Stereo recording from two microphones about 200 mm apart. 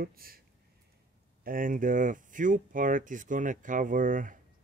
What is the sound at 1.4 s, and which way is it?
Speech, 45° right (ahead or behind).